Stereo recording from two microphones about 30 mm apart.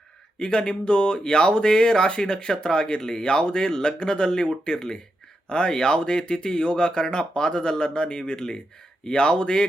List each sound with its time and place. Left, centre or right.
0.3 s speech: left